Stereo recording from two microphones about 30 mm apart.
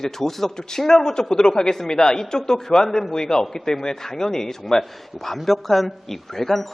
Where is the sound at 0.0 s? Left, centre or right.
Centre.